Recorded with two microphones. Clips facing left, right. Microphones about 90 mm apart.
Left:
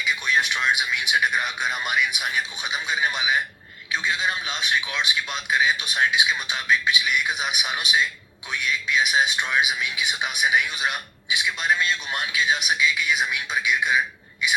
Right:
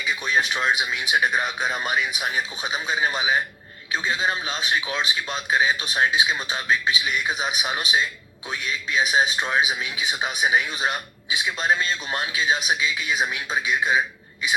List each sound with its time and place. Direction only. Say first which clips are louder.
0.0 s a man's voice: even; 35° right (ahead or behind)